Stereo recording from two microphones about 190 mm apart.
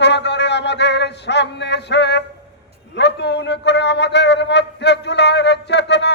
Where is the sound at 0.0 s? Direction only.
65° left (ahead or behind).